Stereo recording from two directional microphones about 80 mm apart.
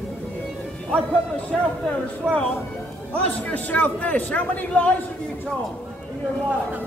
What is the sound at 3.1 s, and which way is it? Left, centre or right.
A man's voice, centre.